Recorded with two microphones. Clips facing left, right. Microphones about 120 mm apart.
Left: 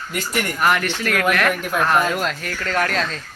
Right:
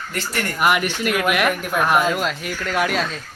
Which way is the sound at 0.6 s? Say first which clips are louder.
Right 1 dB; 10° right (ahead or behind).